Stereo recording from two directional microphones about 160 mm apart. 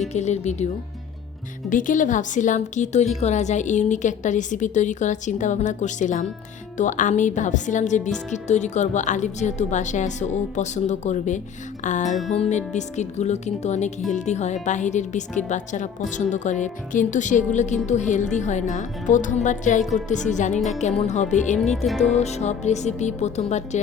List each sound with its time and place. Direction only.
0.1 s a woman's voice: 45° left (ahead or behind)
1.7 s a woman's voice: 55° left (ahead or behind)
21.8 s music: centre (ahead or behind)
22.1 s a woman's voice: 45° left (ahead or behind)